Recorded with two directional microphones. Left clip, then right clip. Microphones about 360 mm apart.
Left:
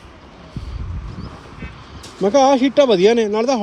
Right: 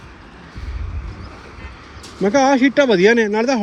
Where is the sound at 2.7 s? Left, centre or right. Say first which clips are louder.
Even; centre.